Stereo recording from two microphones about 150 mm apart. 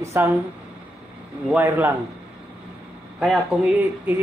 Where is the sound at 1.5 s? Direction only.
10° right (ahead or behind).